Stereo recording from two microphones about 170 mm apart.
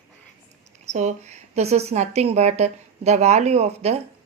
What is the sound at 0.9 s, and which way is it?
A woman's voice, 45° right (ahead or behind).